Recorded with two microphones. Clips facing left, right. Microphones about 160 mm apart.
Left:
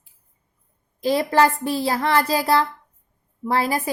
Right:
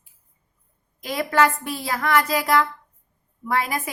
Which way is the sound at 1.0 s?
30° left (ahead or behind).